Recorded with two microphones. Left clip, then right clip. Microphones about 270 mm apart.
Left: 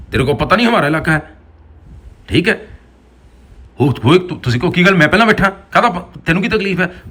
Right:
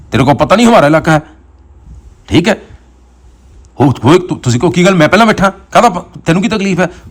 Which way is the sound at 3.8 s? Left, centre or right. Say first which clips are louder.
Right 4 dB; centre.